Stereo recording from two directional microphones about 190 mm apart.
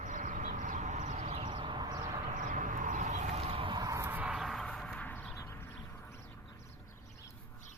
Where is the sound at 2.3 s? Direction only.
45° right (ahead or behind); by 6.2 s 10° left (ahead or behind).